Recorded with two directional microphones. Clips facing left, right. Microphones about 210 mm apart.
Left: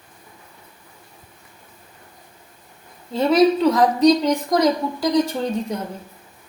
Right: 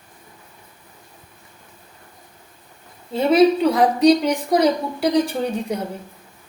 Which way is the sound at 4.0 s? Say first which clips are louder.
Right 1 dB; 30° right (ahead or behind).